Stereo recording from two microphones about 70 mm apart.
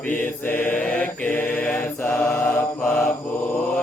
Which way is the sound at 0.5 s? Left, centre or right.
Left.